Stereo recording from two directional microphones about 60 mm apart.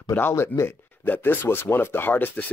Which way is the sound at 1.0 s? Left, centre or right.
Left.